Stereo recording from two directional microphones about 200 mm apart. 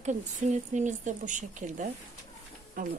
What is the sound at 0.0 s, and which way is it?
Speech, 35° right (ahead or behind).